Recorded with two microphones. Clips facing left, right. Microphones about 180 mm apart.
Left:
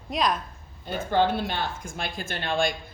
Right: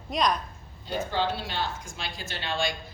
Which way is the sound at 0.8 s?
55° left (ahead or behind).